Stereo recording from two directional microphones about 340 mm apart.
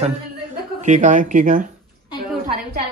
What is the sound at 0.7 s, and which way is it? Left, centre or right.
Speech, right.